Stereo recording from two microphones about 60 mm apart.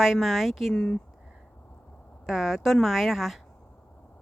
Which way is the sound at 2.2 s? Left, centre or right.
Centre.